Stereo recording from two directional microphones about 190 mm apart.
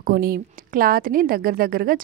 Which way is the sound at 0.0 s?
50° right (ahead or behind).